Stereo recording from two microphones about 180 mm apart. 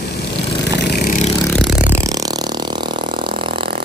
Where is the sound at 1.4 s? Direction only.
5° left (ahead or behind).